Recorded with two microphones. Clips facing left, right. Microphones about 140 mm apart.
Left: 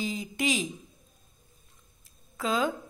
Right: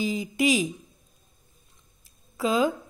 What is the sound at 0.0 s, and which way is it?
Speech, centre (ahead or behind).